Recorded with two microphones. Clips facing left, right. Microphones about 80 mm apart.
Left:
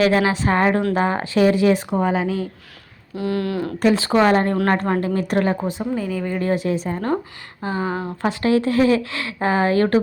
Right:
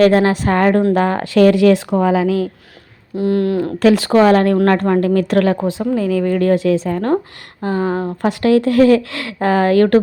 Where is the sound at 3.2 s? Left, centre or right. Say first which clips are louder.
Right 7 dB; right.